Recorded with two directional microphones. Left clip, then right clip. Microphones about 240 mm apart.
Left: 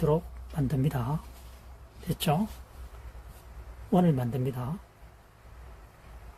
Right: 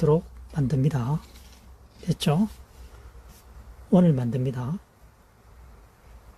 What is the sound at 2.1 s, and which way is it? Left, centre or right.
Speech, right.